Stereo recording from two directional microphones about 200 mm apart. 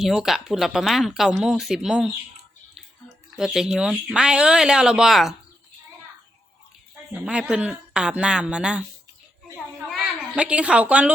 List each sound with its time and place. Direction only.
0.0 s speech: centre (ahead or behind)
3.3 s speech: centre (ahead or behind)
7.1 s speech: 5° right (ahead or behind)
9.9 s a woman's voice: 5° right (ahead or behind)